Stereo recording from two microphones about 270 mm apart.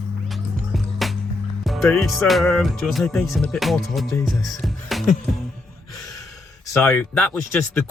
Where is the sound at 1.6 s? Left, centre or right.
Centre.